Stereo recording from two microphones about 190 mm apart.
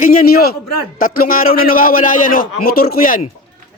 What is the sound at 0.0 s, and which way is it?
A man's voice, 50° left (ahead or behind).